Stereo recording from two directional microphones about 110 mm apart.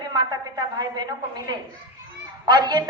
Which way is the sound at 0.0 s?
40° right (ahead or behind).